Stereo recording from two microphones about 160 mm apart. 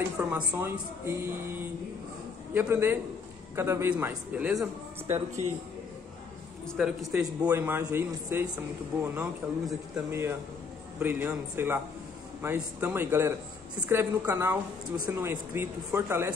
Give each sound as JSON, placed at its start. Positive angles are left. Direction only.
{"t": 0.2, "sound": "speech", "side_deg": -10}
{"t": 5.0, "sound": "speech", "side_deg": -15}
{"t": 6.6, "sound": "a man's voice", "side_deg": 0}
{"t": 11.0, "sound": "speech", "side_deg": -10}